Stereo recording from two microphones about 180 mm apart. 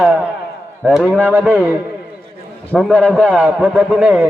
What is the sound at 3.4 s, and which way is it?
Speech, 10° right (ahead or behind).